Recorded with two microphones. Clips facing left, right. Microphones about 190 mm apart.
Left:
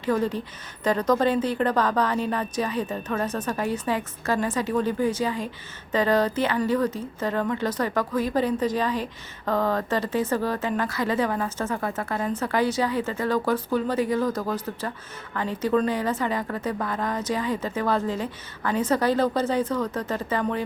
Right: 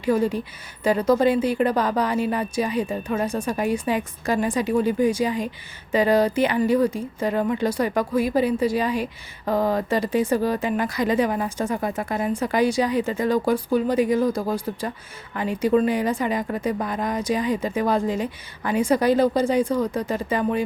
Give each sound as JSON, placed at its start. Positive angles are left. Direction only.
{"t": 0.0, "sound": "speech", "side_deg": -10}